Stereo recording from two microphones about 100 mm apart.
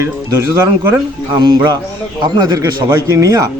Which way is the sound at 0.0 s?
25° right (ahead or behind).